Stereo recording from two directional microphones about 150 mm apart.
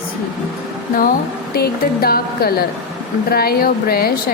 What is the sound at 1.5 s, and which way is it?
Speech, 90° left.